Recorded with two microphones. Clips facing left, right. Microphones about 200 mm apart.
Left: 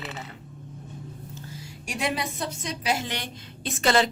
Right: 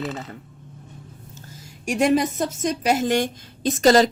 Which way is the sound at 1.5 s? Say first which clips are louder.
Right 12 dB; 45° right (ahead or behind).